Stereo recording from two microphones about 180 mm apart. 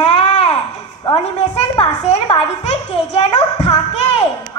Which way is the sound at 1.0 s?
30° left (ahead or behind).